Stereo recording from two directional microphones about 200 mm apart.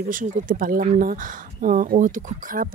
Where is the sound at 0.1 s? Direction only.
45° right (ahead or behind).